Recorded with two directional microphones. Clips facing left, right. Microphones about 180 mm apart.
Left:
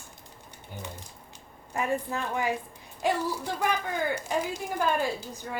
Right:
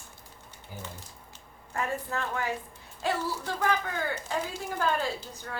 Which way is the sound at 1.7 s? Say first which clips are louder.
Left 3 dB; 15° left (ahead or behind).